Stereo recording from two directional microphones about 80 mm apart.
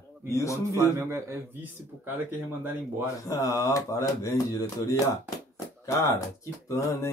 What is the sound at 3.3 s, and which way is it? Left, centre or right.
Speech, left.